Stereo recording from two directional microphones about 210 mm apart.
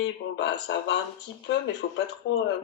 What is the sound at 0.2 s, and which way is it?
Speech, 50° left (ahead or behind).